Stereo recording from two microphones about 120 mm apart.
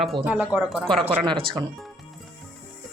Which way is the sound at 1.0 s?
45° right (ahead or behind).